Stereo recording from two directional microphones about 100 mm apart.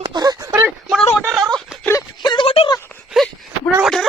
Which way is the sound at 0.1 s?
45° right (ahead or behind).